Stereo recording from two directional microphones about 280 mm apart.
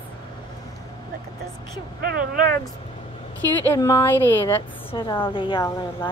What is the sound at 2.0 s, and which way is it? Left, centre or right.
Speech, right.